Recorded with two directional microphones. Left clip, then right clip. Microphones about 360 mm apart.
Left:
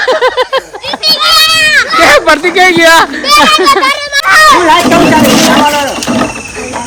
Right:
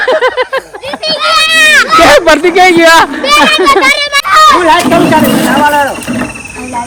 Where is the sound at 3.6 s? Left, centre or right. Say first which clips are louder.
Right 1 dB; right.